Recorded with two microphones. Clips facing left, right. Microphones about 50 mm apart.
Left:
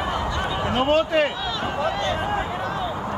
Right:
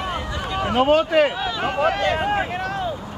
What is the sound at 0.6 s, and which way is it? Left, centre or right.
Speech, centre.